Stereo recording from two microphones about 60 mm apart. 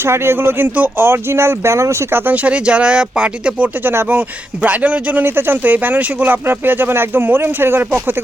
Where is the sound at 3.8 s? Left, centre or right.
Right.